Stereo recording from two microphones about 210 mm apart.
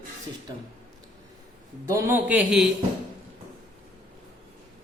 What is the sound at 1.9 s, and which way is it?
Speech, 10° right (ahead or behind).